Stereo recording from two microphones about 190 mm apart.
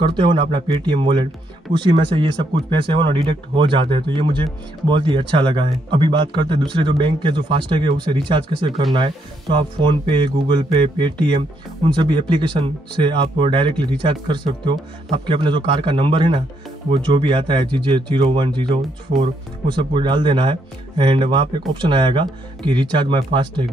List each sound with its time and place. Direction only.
0.0 s speech: 25° right (ahead or behind)